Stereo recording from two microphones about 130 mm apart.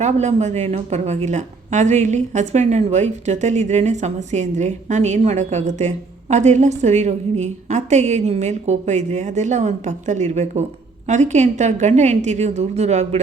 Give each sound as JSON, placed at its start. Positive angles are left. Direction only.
{"t": 0.0, "sound": "a woman's voice", "side_deg": -60}